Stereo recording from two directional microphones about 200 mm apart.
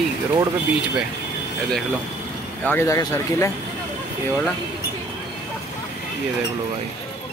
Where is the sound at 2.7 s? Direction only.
15° left (ahead or behind).